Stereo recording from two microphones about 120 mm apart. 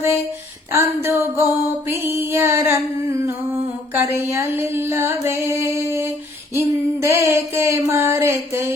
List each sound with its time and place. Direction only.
0.7 s humming: 20° right (ahead or behind)